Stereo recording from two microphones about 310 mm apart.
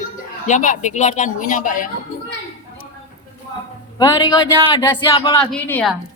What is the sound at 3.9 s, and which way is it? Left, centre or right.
Speech, centre.